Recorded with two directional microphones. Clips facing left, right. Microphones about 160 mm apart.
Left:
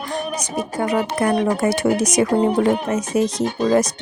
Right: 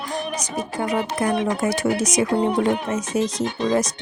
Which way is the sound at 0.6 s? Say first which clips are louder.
Left 3 dB; 65° left (ahead or behind).